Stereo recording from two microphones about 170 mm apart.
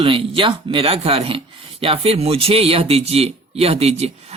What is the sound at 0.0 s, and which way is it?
A man's voice, 30° right (ahead or behind).